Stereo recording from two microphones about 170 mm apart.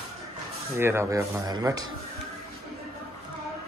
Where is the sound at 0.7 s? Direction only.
15° right (ahead or behind).